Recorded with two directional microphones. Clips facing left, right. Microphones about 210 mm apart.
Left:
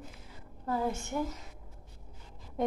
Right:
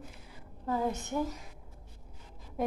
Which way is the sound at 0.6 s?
15° right (ahead or behind).